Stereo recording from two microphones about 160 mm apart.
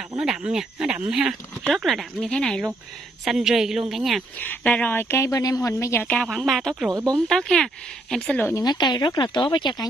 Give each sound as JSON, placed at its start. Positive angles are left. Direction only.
{"t": 0.2, "sound": "speech", "side_deg": -5}
{"t": 4.4, "sound": "a woman's voice", "side_deg": 10}
{"t": 6.9, "sound": "speech", "side_deg": -25}
{"t": 7.2, "sound": "speech", "side_deg": 5}
{"t": 8.6, "sound": "speech", "side_deg": 25}